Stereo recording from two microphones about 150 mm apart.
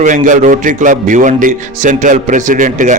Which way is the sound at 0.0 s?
60° right (ahead or behind).